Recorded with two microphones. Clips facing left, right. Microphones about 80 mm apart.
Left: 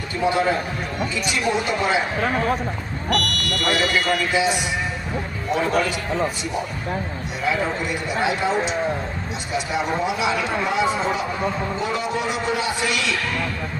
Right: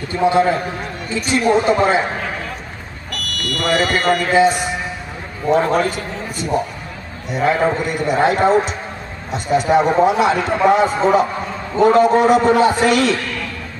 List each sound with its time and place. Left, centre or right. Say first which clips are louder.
0.2 s a man's voice: right 6 dB; right
1.1 s speech: right 9 dB; right
3.1 s buzzer: left 3 dB; centre
4.3 s a man's voice: right 7 dB; right
7.3 s a man's voice: right 7 dB; right